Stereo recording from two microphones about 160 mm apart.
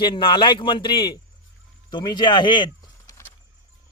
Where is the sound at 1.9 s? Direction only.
30° left (ahead or behind).